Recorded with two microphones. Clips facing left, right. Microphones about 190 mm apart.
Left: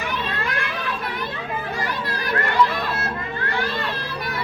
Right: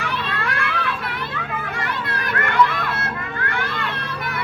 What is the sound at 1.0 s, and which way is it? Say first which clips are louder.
Children playing: even; 25° left (ahead or behind).